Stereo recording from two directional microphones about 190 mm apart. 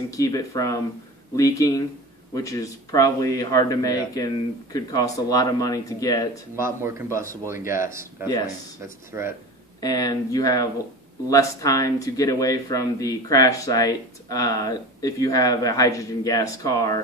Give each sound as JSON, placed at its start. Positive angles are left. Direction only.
{"t": 0.2, "sound": "speech", "side_deg": 15}
{"t": 6.5, "sound": "speech", "side_deg": -15}
{"t": 9.8, "sound": "speech", "side_deg": 20}